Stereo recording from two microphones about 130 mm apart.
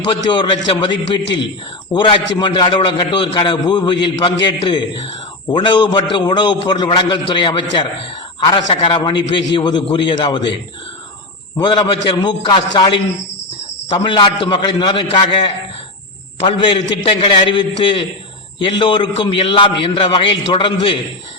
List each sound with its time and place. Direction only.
0.1 s a man's voice: 35° left (ahead or behind)
11.6 s a man's voice: 35° left (ahead or behind)